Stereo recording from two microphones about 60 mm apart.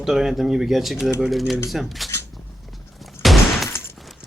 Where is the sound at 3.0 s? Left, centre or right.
Centre.